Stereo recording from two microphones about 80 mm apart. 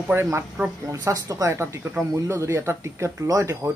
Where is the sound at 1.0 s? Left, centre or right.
Right.